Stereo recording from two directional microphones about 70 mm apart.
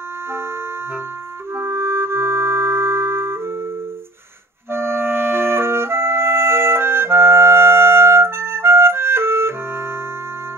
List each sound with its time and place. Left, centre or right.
1.5 s music: right
4.6 s clarinet: right